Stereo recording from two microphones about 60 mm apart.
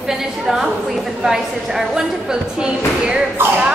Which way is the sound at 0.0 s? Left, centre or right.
Centre.